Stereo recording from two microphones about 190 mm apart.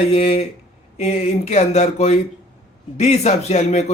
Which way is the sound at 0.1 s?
30° left (ahead or behind).